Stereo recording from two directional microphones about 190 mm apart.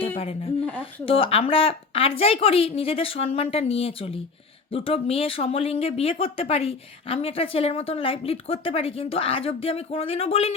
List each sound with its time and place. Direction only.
0.2 s speech: 30° left (ahead or behind)